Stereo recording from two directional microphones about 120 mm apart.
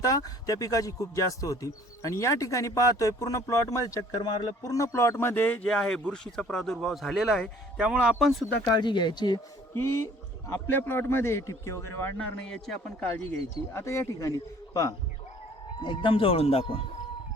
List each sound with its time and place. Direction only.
0.0 s a man's voice: 30° left (ahead or behind); by 8.4 s centre (ahead or behind)
8.7 s speech: 40° left (ahead or behind)
10.5 s speech: 20° left (ahead or behind)
12.5 s speech: 5° left (ahead or behind)
13.7 s speech: 25° left (ahead or behind)
15.8 s speech: 40° left (ahead or behind)